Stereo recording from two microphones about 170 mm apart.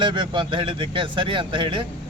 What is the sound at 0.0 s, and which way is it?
Speech, 30° right (ahead or behind).